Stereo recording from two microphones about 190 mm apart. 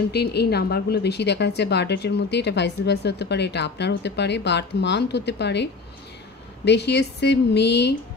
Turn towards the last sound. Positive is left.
turn(degrees=65)  # may be behind; listen again after turning